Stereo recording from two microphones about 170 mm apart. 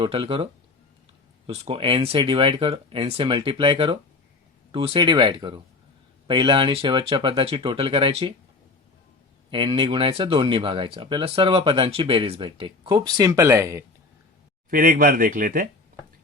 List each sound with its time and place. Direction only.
0.0 s speech: 30° right (ahead or behind)
1.5 s speech: 35° right (ahead or behind)
9.5 s speech: 30° right (ahead or behind)
14.7 s speech: 55° right (ahead or behind)